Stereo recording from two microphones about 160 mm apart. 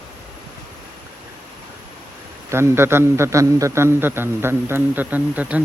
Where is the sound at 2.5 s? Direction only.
15° right (ahead or behind).